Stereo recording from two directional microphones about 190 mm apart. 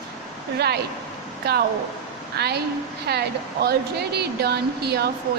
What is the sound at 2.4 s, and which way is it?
Speech, 60° right (ahead or behind).